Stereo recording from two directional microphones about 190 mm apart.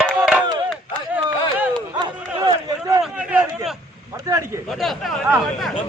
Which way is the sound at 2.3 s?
20° right (ahead or behind).